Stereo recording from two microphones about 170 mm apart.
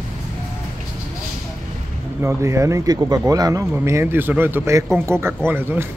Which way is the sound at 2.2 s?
15° right (ahead or behind).